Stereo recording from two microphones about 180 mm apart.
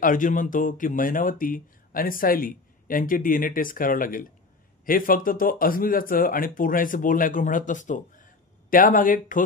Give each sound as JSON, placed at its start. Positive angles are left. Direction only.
{"t": 0.0, "sound": "speech", "side_deg": 45}